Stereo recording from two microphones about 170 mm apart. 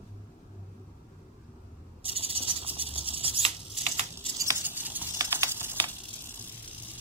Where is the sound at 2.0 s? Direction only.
35° right (ahead or behind).